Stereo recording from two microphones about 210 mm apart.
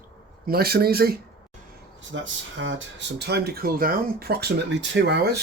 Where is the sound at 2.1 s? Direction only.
60° right (ahead or behind).